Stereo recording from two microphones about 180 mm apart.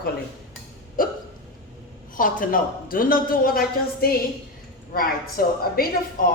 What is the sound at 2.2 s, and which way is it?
A woman's voice, 50° left (ahead or behind).